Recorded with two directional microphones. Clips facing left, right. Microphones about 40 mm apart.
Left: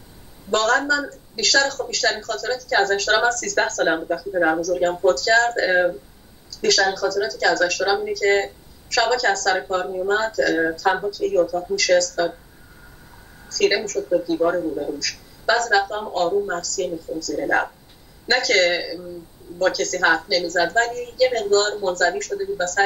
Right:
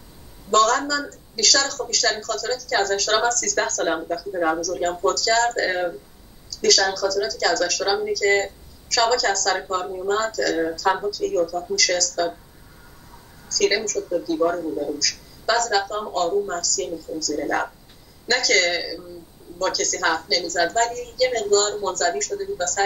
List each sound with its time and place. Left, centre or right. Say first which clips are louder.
0.5 s a woman's voice: even; left
5.0 s a woman's voice: left 2 dB; left
13.5 s a woman's voice: left 1 dB; left